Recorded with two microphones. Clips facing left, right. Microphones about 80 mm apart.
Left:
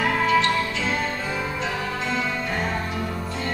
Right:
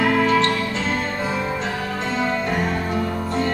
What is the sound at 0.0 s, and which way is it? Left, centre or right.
Music, right.